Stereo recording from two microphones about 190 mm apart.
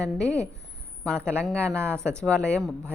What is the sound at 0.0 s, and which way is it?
A woman's voice, 5° left (ahead or behind).